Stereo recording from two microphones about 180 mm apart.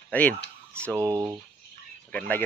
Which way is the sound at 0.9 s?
20° right (ahead or behind).